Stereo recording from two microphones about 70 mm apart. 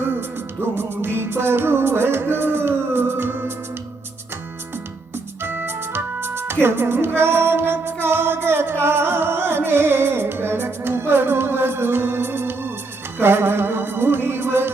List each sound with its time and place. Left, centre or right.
0.0 s music: right
5.4 s music: right